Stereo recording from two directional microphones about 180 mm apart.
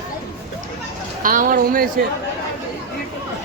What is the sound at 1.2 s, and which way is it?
Speech, 50° right (ahead or behind).